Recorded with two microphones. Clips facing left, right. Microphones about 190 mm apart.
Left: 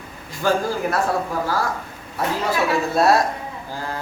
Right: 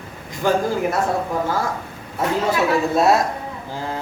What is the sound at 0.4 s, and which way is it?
Speech, 20° right (ahead or behind).